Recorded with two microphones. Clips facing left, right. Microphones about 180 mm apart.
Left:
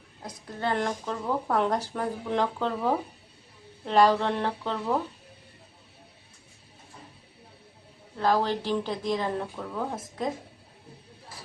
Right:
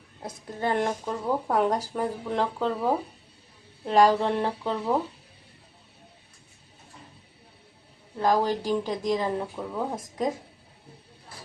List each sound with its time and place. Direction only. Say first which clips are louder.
0.2 s a woman's voice: right 2 dB; 25° right (ahead or behind)
8.2 s speech: right 1 dB; 10° right (ahead or behind)